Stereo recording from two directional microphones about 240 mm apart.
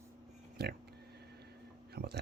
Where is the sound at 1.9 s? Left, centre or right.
Right.